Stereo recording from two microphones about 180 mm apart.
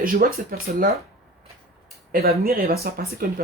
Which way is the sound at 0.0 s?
55° right (ahead or behind).